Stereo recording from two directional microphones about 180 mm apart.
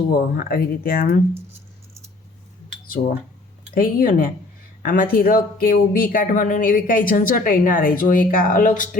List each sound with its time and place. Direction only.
0.1 s speech: 55° left (ahead or behind)
3.8 s speech: 55° left (ahead or behind)